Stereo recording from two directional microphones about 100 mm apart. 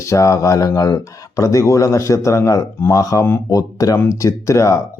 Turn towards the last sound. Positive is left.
turn(degrees=30)  # may be behind; listen again after turning